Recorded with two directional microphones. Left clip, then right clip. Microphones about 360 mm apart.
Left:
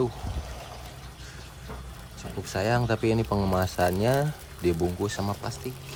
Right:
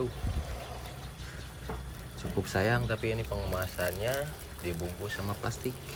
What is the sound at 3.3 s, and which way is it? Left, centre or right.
Speech, left.